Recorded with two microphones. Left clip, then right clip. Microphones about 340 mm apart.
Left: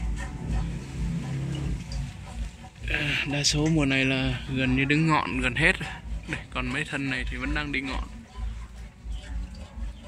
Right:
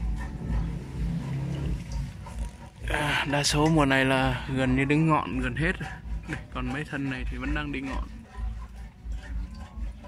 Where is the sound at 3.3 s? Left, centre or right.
Right.